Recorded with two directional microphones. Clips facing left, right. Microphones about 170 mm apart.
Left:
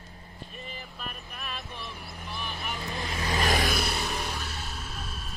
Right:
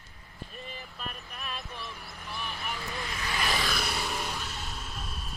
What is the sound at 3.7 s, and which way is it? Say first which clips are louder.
Music: left 2 dB; 5° left (ahead or behind).